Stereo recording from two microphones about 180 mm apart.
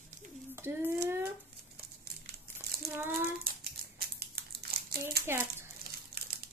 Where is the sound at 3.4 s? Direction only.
60° right (ahead or behind).